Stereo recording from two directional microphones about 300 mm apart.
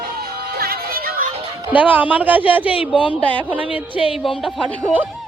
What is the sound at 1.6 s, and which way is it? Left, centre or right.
Speech, centre.